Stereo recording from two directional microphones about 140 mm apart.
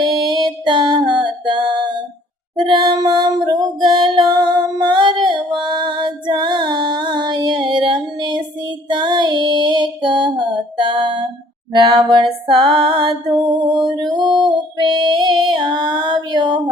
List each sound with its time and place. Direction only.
0.0 s music: 35° right (ahead or behind)
2.6 s female singing: 35° right (ahead or behind)